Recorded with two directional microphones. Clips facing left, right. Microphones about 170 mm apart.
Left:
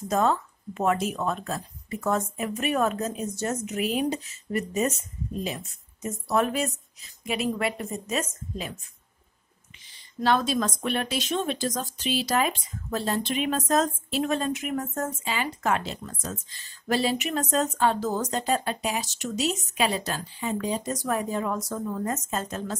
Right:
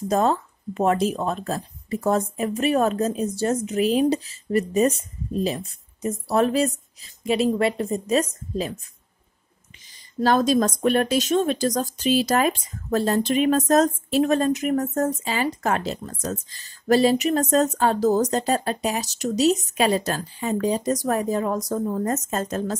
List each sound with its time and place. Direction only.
0.1 s speech: 35° right (ahead or behind)
10.2 s speech: 40° right (ahead or behind)